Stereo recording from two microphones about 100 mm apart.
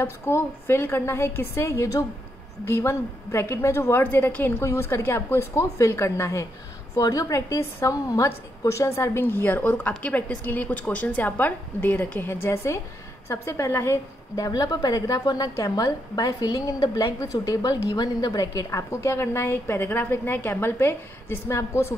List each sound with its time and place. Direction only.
0.0 s a woman's voice: 25° left (ahead or behind)
14.3 s a woman's voice: 40° left (ahead or behind)